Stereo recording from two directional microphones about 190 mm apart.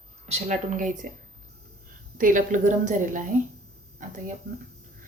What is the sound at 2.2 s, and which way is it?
A woman's voice, 45° right (ahead or behind).